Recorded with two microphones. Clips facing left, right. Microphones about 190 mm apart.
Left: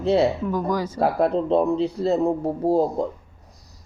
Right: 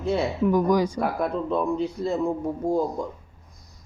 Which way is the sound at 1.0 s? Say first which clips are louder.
Left 5 dB; 30° left (ahead or behind).